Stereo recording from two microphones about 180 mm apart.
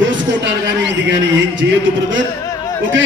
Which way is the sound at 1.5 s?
90° right.